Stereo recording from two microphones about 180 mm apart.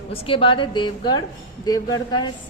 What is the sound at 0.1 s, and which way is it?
A woman's voice, 30° left (ahead or behind).